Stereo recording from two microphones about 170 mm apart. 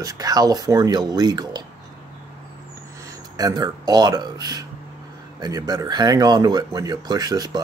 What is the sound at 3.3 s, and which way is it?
Speech, 20° right (ahead or behind).